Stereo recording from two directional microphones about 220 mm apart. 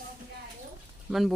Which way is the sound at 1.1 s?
Centre (ahead or behind).